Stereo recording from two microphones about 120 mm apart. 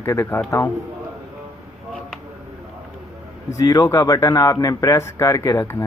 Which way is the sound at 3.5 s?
30° left (ahead or behind).